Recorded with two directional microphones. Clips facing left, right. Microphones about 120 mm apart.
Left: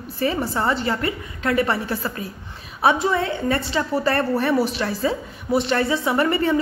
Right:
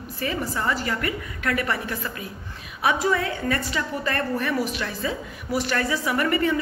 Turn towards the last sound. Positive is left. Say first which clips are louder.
# left 3 dB
turn(degrees=30)  # may be behind; listen again after turning